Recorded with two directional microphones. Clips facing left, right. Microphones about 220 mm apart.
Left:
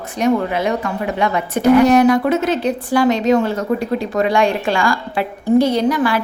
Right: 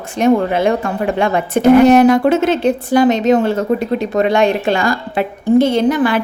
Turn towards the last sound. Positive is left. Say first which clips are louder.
# right 3 dB
turn(degrees=-25)  # may be behind; listen again after turning